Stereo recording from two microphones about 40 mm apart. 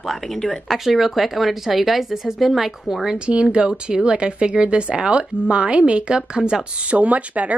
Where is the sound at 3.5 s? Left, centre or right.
Right.